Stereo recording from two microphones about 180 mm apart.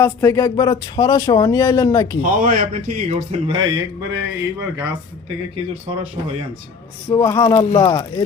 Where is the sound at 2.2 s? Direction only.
45° right (ahead or behind).